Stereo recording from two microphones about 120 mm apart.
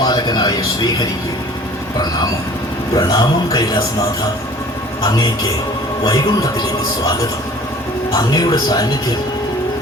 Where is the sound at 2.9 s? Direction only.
30° left (ahead or behind).